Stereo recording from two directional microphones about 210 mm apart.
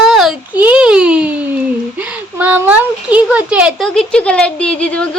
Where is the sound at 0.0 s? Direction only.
Centre (ahead or behind).